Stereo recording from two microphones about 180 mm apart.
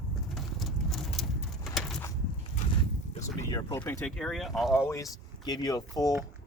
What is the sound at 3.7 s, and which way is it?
Speech, 15° left (ahead or behind).